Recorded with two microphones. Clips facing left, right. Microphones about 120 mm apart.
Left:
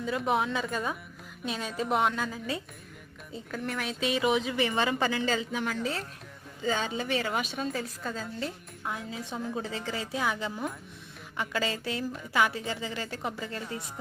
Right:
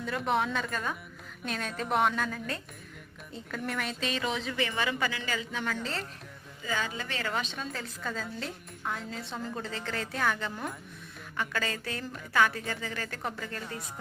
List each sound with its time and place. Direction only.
0.0 s a woman's voice: centre (ahead or behind); by 4.9 s 20° left (ahead or behind)
4.9 s speech: 35° left (ahead or behind)
5.4 s a woman's voice: 15° left (ahead or behind)
6.6 s a woman's voice: 25° left (ahead or behind); by 9.6 s 5° left (ahead or behind)
9.6 s a woman's voice: 15° left (ahead or behind)
11.3 s a woman's voice: 20° left (ahead or behind)